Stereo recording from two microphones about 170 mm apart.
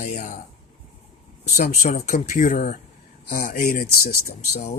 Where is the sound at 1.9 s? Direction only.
45° left (ahead or behind).